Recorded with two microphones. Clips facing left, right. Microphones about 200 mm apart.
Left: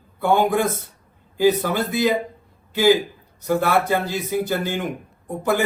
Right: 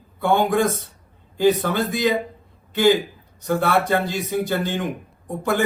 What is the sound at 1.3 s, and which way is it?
Speech, 5° left (ahead or behind).